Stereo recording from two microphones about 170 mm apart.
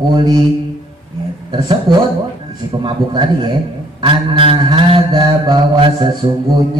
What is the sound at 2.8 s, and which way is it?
Mantra, 25° right (ahead or behind).